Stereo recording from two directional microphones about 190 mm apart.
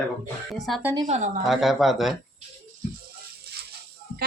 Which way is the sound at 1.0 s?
35° right (ahead or behind).